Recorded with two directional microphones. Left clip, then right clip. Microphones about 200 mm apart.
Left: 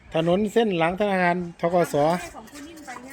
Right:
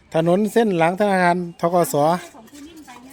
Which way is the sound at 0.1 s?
40° right (ahead or behind).